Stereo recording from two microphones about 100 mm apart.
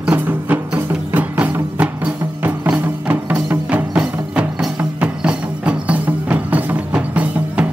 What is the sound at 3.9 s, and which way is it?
Music, 10° right (ahead or behind).